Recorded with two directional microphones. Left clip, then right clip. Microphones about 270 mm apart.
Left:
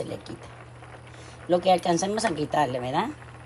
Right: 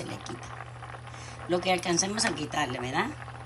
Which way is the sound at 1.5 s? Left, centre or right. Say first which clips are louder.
Left 6 dB; centre.